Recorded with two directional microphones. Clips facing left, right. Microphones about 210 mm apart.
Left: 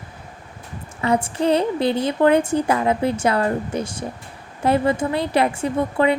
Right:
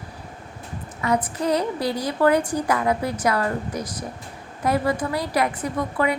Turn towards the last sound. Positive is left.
turn(degrees=25)  # may be behind; listen again after turning